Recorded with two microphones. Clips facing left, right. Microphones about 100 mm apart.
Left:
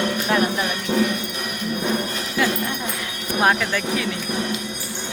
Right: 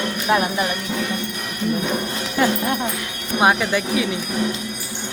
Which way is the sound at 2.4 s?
35° right (ahead or behind).